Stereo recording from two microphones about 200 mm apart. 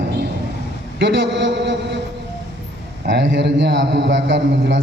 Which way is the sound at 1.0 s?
60° right (ahead or behind).